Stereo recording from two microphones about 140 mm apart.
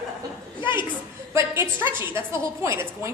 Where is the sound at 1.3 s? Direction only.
15° right (ahead or behind).